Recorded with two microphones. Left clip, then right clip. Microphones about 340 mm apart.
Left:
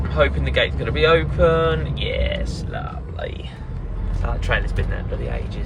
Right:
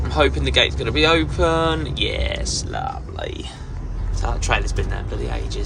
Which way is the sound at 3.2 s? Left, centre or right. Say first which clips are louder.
Right 1 dB; centre.